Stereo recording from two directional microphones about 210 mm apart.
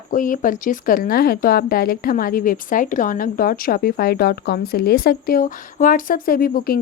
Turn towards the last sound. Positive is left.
turn(degrees=45)  # may be behind; listen again after turning